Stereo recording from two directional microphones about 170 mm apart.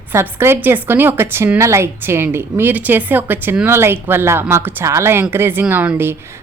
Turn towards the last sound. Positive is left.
turn(degrees=-15)  # may be behind; listen again after turning